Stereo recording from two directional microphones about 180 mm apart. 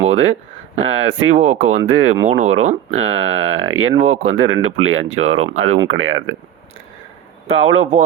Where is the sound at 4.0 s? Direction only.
40° right (ahead or behind).